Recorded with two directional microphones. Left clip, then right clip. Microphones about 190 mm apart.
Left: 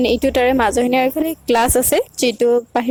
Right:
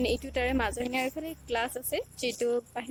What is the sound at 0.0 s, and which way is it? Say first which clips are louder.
A woman's voice: left 15 dB; 40° left (ahead or behind).